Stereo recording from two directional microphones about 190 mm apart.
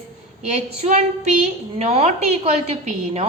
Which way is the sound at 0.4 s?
35° right (ahead or behind).